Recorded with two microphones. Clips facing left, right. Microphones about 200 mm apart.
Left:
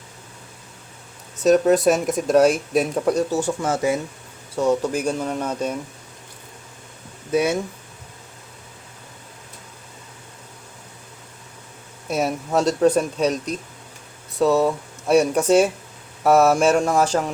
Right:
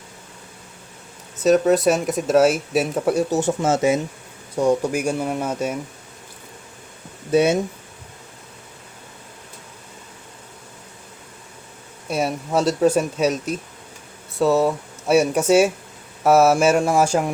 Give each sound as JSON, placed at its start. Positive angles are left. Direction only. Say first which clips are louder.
{"t": 1.4, "sound": "speech", "louder": "even", "side_deg": 0}
{"t": 3.2, "sound": "speech", "louder": "right 3 dB", "side_deg": -20}
{"t": 7.3, "sound": "speech", "louder": "right 3 dB", "side_deg": -25}
{"t": 12.0, "sound": "speech", "louder": "even", "side_deg": 0}